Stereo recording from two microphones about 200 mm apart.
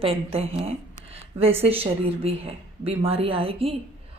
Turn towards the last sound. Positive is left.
turn(degrees=-30)  # may be behind; listen again after turning